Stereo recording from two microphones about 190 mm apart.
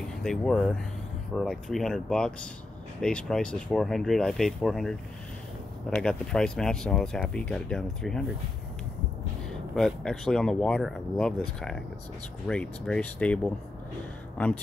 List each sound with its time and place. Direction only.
0.2 s speech: 5° left (ahead or behind)
9.5 s speech: centre (ahead or behind)